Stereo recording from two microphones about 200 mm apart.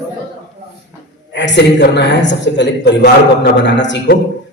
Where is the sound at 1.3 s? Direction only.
60° left (ahead or behind).